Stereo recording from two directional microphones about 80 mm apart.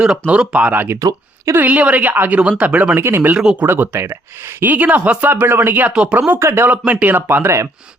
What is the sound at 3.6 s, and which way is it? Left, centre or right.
Speech, right.